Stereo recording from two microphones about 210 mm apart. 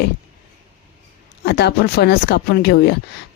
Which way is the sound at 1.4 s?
50° left (ahead or behind).